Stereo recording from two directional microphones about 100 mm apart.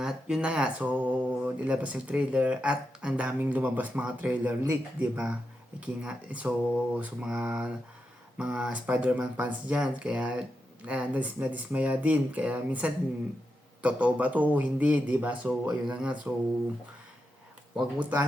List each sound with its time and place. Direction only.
0.0 s speech: 5° right (ahead or behind)
17.7 s speech: 15° right (ahead or behind)